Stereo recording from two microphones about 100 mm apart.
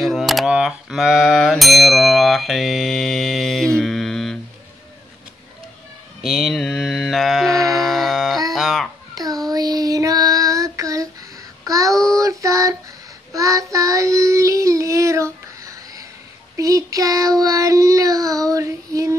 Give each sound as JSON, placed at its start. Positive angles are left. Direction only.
{"t": 0.0, "sound": "a sound", "side_deg": 0}
{"t": 6.2, "sound": "mantra", "side_deg": 0}
{"t": 8.5, "sound": "speech", "side_deg": 0}
{"t": 9.1, "sound": "child singing", "side_deg": -40}
{"t": 11.9, "sound": "child singing", "side_deg": 5}
{"t": 12.2, "sound": "child singing", "side_deg": -35}